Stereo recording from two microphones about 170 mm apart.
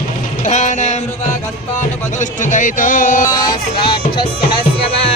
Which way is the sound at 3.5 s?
30° left (ahead or behind).